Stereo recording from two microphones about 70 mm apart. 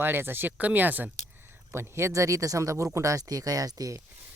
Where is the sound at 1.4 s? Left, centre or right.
Right.